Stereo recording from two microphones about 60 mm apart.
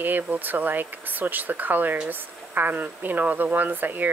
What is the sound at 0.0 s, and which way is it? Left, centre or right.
Speech, right.